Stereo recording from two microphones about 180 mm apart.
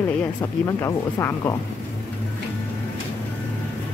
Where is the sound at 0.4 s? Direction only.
20° left (ahead or behind).